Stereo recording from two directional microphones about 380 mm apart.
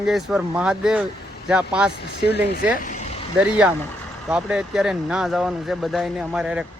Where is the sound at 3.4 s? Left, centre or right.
Centre.